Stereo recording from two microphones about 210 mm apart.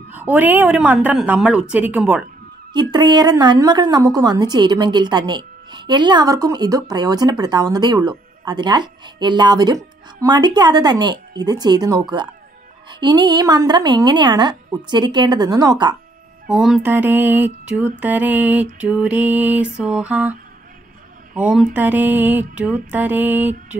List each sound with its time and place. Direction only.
0.1 s music: 10° right (ahead or behind)
2.7 s a woman's voice: 20° right (ahead or behind)
16.4 s music: centre (ahead or behind)